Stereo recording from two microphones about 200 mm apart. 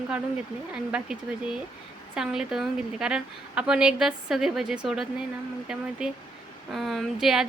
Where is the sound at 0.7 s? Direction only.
5° right (ahead or behind).